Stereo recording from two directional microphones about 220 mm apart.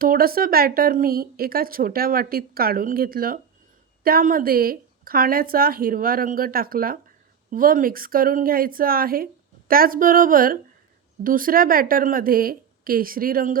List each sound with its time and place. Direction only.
0.0 s speech: 40° right (ahead or behind)